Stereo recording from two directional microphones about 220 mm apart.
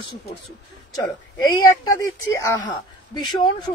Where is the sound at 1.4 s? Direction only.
15° left (ahead or behind).